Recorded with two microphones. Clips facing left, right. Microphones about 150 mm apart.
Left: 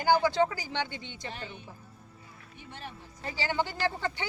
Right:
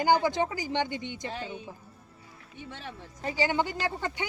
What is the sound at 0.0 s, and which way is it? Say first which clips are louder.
Speech: even; 20° right (ahead or behind).